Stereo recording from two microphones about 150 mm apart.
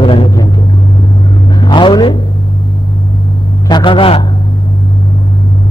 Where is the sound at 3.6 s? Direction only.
30° left (ahead or behind).